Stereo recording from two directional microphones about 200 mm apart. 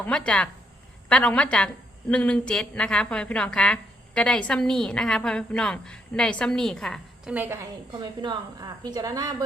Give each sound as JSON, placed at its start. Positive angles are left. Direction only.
{"t": 0.0, "sound": "a woman's voice", "side_deg": 5}
{"t": 7.3, "sound": "a woman's voice", "side_deg": -10}
{"t": 8.2, "sound": "a woman's voice", "side_deg": -20}